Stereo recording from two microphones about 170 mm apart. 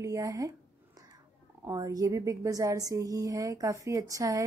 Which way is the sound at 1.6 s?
20° right (ahead or behind).